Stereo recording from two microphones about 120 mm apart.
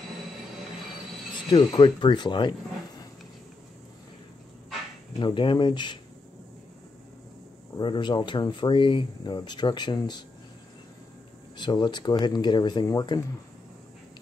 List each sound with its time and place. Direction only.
1.3 s speech: 40° left (ahead or behind)
5.2 s speech: 45° left (ahead or behind)
7.7 s speech: 40° left (ahead or behind)
11.5 s speech: 40° left (ahead or behind)